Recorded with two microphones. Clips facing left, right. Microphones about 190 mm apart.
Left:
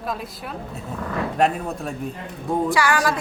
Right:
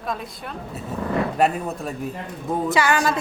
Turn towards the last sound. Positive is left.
turn(degrees=-20)  # may be behind; listen again after turning